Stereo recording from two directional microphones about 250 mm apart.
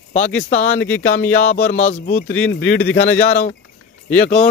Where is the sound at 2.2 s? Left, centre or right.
Centre.